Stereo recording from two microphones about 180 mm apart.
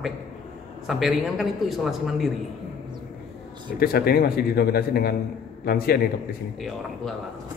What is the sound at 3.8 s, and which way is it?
A man's voice, 60° left (ahead or behind).